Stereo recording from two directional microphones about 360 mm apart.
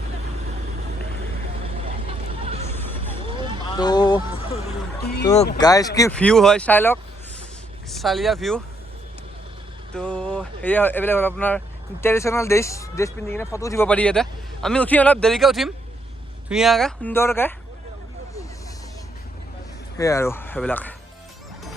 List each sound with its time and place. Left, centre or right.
1.8 s vehicle: centre
3.8 s speech: centre
4.9 s a sound: left
5.2 s speech: centre
9.9 s speech: centre
20.0 s speech: centre